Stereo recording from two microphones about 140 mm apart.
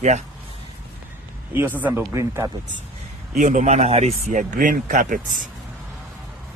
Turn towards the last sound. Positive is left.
turn(degrees=-65)  # may be behind; listen again after turning